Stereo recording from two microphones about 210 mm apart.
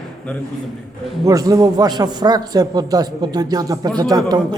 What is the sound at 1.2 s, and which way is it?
A man's voice, 15° right (ahead or behind).